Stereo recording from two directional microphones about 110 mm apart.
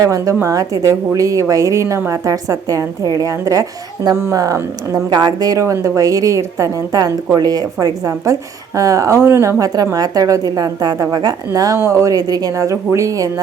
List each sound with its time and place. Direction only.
0.0 s a woman's voice: 30° right (ahead or behind)